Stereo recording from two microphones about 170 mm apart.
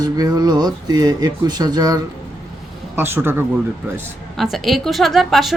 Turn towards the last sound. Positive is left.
turn(degrees=0)  # may be behind; listen again after turning